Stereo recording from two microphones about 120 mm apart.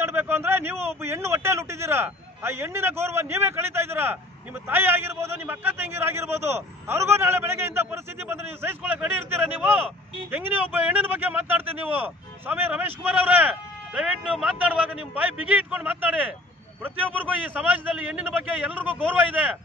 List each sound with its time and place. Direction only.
0.0 s a man's voice: 20° right (ahead or behind)